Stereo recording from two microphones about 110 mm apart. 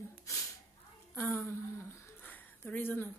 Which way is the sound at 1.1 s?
20° left (ahead or behind).